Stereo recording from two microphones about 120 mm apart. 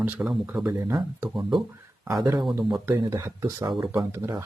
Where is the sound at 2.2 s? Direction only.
35° right (ahead or behind).